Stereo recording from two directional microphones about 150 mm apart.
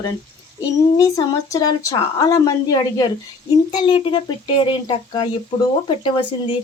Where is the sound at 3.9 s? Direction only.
35° left (ahead or behind).